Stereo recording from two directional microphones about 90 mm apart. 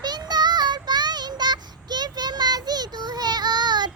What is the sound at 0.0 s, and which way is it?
Child singing, 50° right (ahead or behind).